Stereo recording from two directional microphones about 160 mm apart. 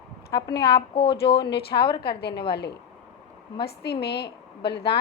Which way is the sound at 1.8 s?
80° left.